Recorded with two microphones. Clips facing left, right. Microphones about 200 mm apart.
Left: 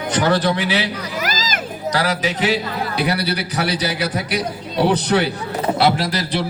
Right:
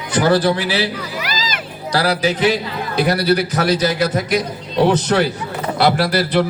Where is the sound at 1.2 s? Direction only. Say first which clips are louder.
Left 3 dB; 45° left (ahead or behind).